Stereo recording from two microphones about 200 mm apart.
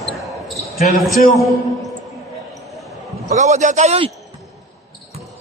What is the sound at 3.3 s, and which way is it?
Speech, 35° right (ahead or behind).